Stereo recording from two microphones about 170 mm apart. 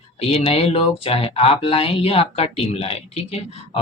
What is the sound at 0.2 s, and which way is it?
Speech, 35° left (ahead or behind).